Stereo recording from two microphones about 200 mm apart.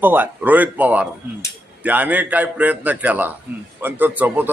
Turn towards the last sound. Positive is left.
turn(degrees=-10)  # may be behind; listen again after turning